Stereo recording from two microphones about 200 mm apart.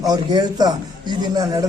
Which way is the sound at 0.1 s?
20° right (ahead or behind).